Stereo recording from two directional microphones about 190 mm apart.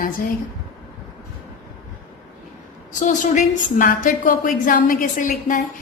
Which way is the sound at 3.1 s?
45° left (ahead or behind).